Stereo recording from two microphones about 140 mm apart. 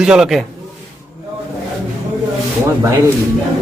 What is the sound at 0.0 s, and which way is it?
Speech, 5° right (ahead or behind).